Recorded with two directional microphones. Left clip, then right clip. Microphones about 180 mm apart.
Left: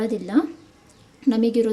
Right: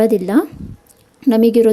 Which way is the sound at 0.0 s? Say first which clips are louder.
Right 9 dB; 45° right (ahead or behind).